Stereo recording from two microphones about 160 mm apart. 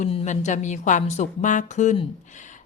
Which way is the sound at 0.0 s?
45° left (ahead or behind).